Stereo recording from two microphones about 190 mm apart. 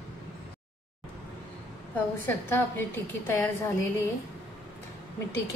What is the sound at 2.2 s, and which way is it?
A woman's voice, 10° left (ahead or behind).